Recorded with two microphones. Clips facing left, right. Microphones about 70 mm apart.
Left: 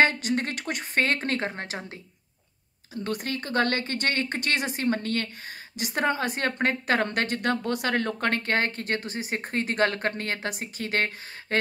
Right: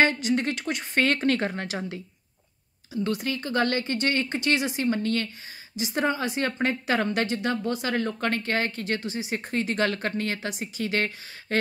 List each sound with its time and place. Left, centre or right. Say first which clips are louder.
0.0 s a woman's voice: even; left
1.0 s speech: right 7 dB; left
3.0 s a woman's voice: right 3 dB; left